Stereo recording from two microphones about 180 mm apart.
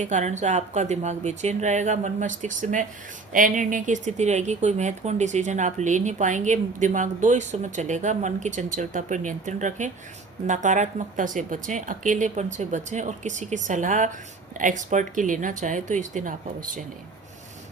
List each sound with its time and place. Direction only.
0.0 s speech: 40° right (ahead or behind)